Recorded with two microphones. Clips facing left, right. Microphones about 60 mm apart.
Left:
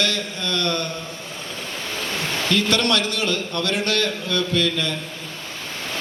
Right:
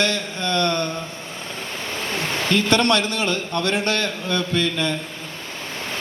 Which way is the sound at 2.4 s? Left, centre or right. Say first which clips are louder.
Right 2 dB; right.